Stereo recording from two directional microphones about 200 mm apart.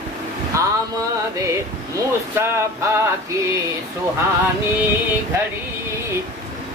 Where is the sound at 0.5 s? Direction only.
15° right (ahead or behind).